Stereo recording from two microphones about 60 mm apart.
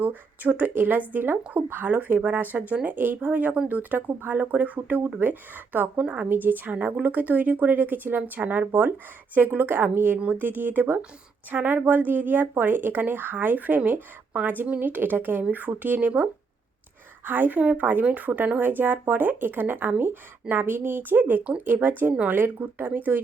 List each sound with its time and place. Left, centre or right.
0.0 s a woman's voice: right
17.2 s a woman's voice: right